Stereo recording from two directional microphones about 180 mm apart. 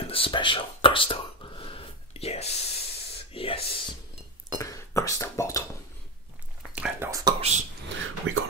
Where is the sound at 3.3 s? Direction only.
30° left (ahead or behind).